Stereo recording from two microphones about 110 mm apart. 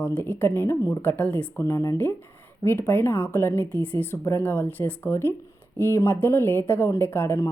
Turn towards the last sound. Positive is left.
turn(degrees=25)  # may be behind; listen again after turning